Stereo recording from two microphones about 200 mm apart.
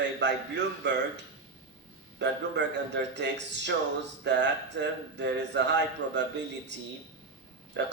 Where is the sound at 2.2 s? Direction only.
60° right (ahead or behind).